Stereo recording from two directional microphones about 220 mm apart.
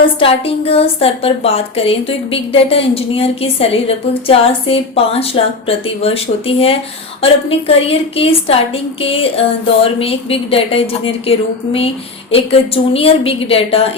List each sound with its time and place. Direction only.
0.0 s a woman's voice: 25° left (ahead or behind)